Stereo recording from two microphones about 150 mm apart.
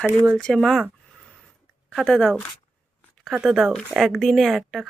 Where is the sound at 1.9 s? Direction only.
Centre (ahead or behind).